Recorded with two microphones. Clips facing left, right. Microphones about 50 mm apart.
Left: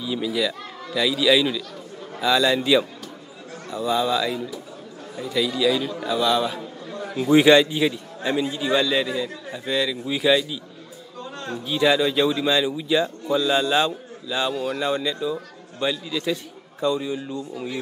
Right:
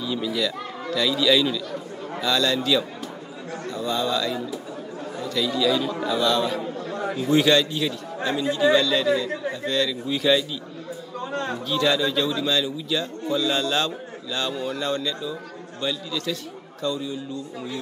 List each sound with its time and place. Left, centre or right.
0.0 s a man's voice: centre
7.2 s a man's voice: centre
11.3 s a sound: right
11.6 s a man's voice: centre